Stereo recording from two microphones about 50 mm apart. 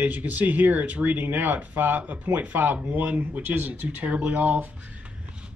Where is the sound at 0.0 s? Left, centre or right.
Right.